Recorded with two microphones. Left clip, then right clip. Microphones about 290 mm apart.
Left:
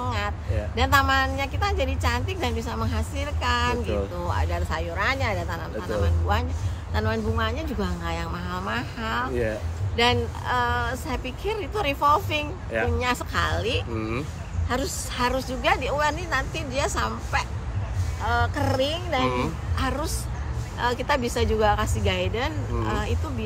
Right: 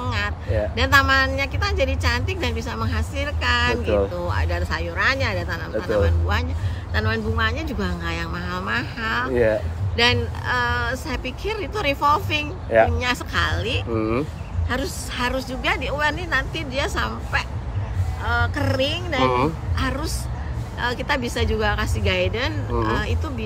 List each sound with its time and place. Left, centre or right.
0.0 s a sound: centre
0.7 s a woman's voice: centre
9.3 s a woman's voice: centre
9.9 s a woman's voice: centre
13.9 s a woman's voice: centre
14.7 s a woman's voice: centre
19.2 s a woman's voice: centre
19.8 s a woman's voice: centre